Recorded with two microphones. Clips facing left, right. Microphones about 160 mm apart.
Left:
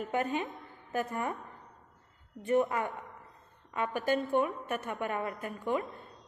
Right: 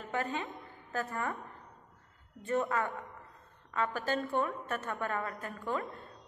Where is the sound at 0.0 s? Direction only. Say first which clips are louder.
Left 4 dB; 15° left (ahead or behind).